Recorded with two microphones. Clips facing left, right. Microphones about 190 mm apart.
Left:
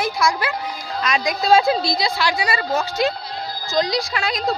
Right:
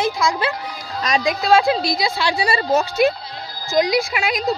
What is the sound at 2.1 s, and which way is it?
A woman's voice, 30° right (ahead or behind).